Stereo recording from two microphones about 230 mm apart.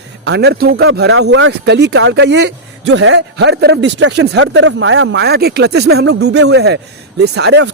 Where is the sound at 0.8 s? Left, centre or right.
Right.